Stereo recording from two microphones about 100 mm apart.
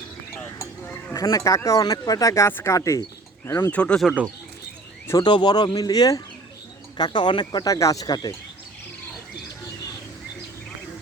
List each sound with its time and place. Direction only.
1.1 s speech: 30° left (ahead or behind)
2.5 s speech: 20° left (ahead or behind)
2.7 s speech: 30° left (ahead or behind)
3.7 s speech: 10° left (ahead or behind)
5.1 s speech: 45° left (ahead or behind)